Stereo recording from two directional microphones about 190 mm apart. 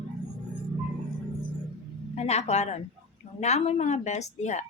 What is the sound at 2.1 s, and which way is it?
A man's voice, 35° left (ahead or behind).